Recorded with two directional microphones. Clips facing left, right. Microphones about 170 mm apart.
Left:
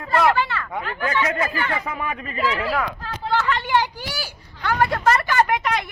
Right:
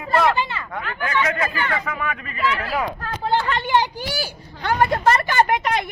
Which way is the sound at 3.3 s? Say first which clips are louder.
Right 1 dB; 30° right (ahead or behind).